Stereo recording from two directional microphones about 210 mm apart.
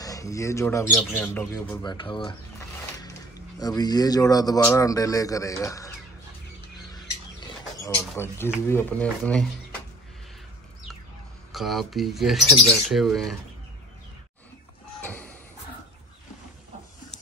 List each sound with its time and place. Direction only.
0.0 s speech: 15° left (ahead or behind)
1.8 s speech: 20° left (ahead or behind)
7.7 s a sound: 15° left (ahead or behind)
8.2 s speech: 10° left (ahead or behind)
11.5 s speech: centre (ahead or behind)
15.0 s a sound: 10° left (ahead or behind)